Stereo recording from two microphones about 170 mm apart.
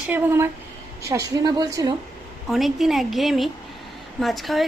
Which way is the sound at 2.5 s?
Centre (ahead or behind).